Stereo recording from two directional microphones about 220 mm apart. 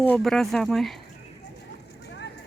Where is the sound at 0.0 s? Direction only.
5° left (ahead or behind).